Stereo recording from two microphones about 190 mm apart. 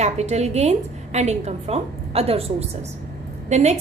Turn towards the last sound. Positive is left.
turn(degrees=-35)  # may be behind; listen again after turning